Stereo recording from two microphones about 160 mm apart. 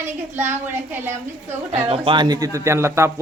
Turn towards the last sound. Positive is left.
turn(degrees=-15)  # may be behind; listen again after turning